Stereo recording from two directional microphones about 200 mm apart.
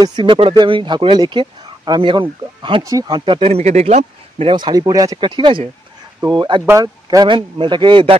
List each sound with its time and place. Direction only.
0.0 s speech: 20° right (ahead or behind)